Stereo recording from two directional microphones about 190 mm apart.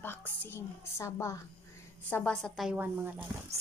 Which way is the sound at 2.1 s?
5° left (ahead or behind).